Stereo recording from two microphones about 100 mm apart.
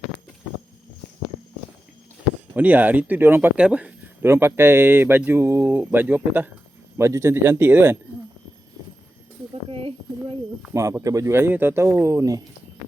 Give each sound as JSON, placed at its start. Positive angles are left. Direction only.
{"t": 2.6, "sound": "speech", "side_deg": -15}
{"t": 3.6, "sound": "speech", "side_deg": -10}
{"t": 4.2, "sound": "speech", "side_deg": -25}
{"t": 6.9, "sound": "speech", "side_deg": -30}
{"t": 9.6, "sound": "a sound", "side_deg": -65}
{"t": 11.0, "sound": "speech", "side_deg": -35}